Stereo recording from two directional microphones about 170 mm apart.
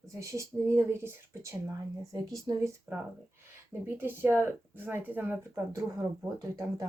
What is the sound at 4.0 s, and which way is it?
Speech, 10° right (ahead or behind).